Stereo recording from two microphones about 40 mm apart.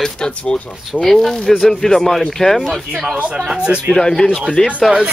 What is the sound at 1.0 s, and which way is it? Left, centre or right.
Speech, centre.